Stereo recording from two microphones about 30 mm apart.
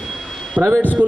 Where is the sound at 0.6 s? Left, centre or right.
Right.